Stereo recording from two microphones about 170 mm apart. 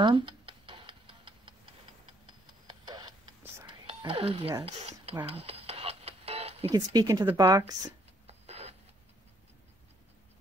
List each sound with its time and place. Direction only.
0.0 s tick-tock: 30° right (ahead or behind)
2.2 s a sound: 25° right (ahead or behind)
3.6 s whispering: 30° right (ahead or behind)
4.6 s speech: 40° right (ahead or behind)
5.1 s music: 30° right (ahead or behind)
6.7 s speech: 25° right (ahead or behind)
8.3 s printer: 40° right (ahead or behind)